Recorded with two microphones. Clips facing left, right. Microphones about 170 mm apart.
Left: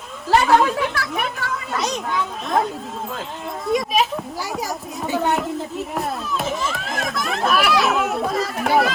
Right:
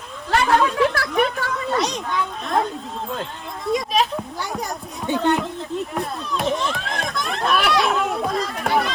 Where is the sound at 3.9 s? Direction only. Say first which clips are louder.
Left 1 dB; centre (ahead or behind).